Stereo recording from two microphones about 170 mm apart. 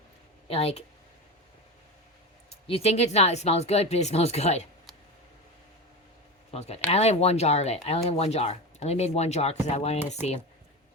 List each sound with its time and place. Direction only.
0.4 s speech: 35° left (ahead or behind)
2.5 s speech: 35° left (ahead or behind)
6.5 s speech: 40° left (ahead or behind)